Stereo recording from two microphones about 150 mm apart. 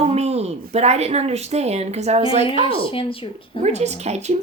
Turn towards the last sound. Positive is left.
turn(degrees=-45)  # may be behind; listen again after turning